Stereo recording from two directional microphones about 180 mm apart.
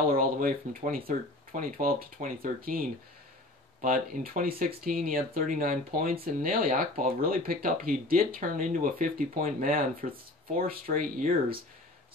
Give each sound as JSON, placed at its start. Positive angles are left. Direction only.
{"t": 0.1, "sound": "speech", "side_deg": -50}